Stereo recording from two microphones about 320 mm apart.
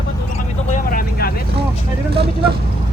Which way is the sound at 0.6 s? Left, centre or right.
Left.